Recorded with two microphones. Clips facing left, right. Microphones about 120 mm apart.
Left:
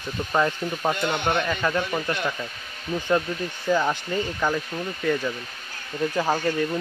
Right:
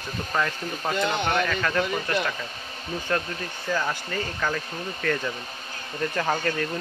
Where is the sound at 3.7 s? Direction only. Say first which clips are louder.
Left 5 dB; 15° left (ahead or behind).